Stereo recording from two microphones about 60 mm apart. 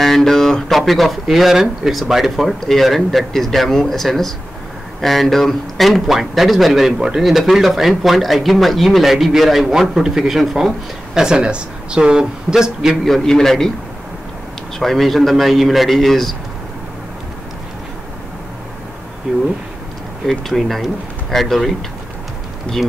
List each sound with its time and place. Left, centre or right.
0.0 s speech: centre
13.0 s a man's voice: centre
14.8 s speech: centre
19.3 s speech: centre
20.2 s speech: centre